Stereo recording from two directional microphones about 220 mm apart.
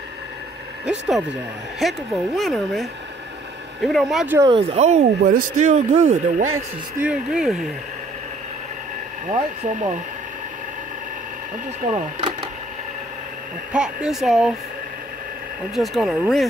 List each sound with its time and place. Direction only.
0.8 s speech: centre (ahead or behind)
4.4 s speech: 20° right (ahead or behind)
7.0 s speech: 5° right (ahead or behind)
9.3 s speech: 30° right (ahead or behind)
11.8 s speech: 25° right (ahead or behind)
13.7 s speech: centre (ahead or behind)
15.7 s speech: centre (ahead or behind)